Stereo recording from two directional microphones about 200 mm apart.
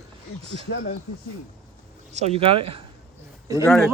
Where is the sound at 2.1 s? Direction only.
30° right (ahead or behind).